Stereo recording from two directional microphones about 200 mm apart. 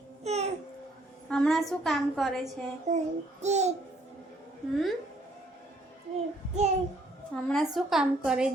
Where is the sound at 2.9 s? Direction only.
35° right (ahead or behind).